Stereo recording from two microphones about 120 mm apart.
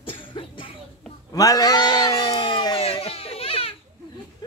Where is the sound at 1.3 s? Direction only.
30° left (ahead or behind).